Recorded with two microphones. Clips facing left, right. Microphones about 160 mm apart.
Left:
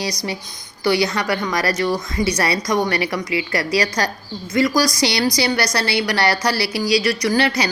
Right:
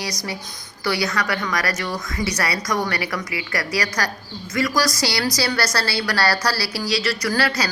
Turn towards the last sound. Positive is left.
turn(degrees=20)  # may be behind; listen again after turning